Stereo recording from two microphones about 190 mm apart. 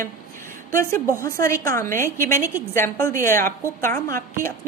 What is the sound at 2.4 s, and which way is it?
Speech, 10° right (ahead or behind).